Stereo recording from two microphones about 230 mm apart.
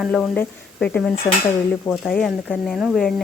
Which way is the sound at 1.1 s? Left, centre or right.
Left.